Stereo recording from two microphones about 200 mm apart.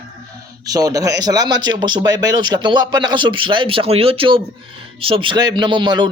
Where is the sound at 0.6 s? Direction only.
20° right (ahead or behind).